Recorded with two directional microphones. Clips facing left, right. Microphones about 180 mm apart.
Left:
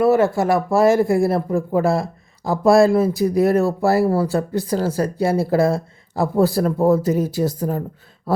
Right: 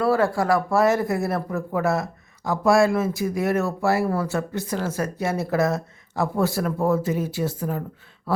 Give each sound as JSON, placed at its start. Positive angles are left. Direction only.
{"t": 0.0, "sound": "speech", "side_deg": 25}